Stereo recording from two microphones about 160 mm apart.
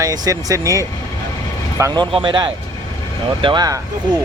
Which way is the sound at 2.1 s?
30° right (ahead or behind).